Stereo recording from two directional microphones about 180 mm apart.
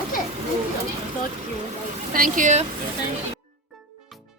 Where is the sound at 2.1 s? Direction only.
50° right (ahead or behind).